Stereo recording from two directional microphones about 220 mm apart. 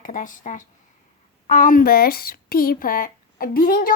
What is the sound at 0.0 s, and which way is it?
A woman's voice, 35° left (ahead or behind).